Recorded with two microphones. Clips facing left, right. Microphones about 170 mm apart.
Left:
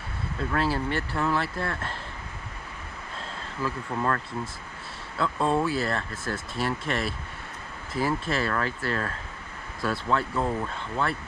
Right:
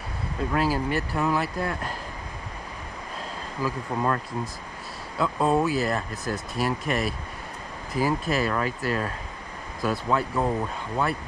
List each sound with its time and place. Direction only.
0.4 s speech: 15° right (ahead or behind)
3.6 s speech: 15° right (ahead or behind)